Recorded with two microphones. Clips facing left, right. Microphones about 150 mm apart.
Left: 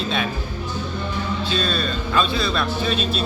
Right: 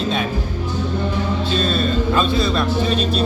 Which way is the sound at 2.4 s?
20° right (ahead or behind).